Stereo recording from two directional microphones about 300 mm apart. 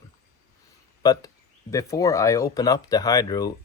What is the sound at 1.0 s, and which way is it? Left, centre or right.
Speech, centre.